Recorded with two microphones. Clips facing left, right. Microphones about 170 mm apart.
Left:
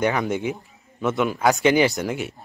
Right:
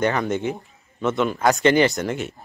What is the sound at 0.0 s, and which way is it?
Speech, 10° left (ahead or behind).